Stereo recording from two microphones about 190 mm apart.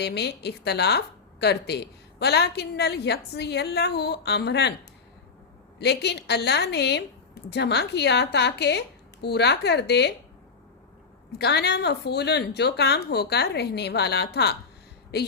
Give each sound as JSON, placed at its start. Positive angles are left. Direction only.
{"t": 0.0, "sound": "a woman's voice", "side_deg": 60}
{"t": 5.8, "sound": "a woman's voice", "side_deg": 60}
{"t": 11.3, "sound": "a woman's voice", "side_deg": 60}